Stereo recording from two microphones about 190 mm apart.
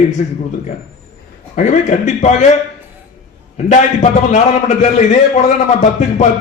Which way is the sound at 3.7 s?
35° left (ahead or behind).